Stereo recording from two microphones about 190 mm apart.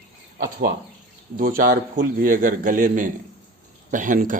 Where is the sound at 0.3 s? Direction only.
45° right (ahead or behind).